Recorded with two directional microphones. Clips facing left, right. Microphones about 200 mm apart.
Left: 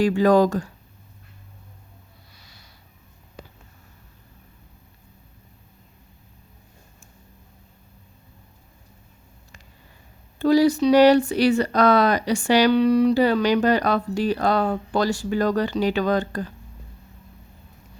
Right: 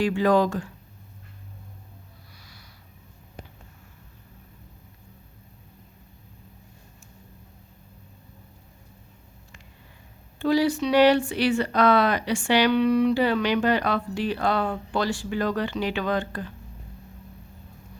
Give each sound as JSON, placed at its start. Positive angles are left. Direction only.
{"t": 0.0, "sound": "speech", "side_deg": 40}
{"t": 2.4, "sound": "a sound", "side_deg": 25}
{"t": 10.3, "sound": "speech", "side_deg": 40}